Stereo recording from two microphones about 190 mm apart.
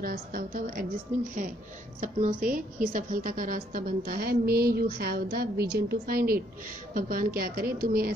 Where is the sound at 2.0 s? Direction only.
45° right (ahead or behind).